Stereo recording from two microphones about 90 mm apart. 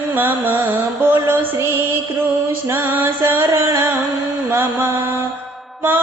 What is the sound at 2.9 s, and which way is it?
Music, 20° right (ahead or behind).